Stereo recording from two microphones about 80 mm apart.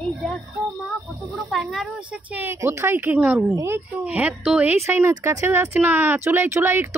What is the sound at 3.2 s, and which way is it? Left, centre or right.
Speech, centre.